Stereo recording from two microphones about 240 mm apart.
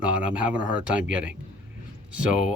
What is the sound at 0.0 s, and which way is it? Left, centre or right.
Speech, centre.